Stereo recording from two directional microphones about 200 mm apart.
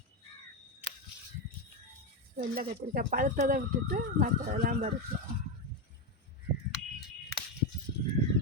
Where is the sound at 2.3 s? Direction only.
50° right (ahead or behind).